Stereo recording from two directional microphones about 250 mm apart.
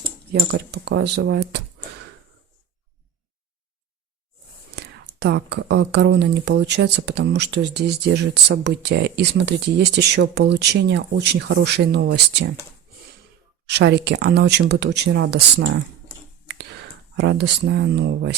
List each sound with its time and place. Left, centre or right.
0.3 s speech: right
4.7 s speech: right
13.7 s speech: right
17.2 s speech: right